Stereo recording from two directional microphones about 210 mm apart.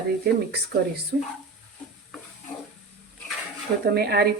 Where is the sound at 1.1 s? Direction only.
50° right (ahead or behind).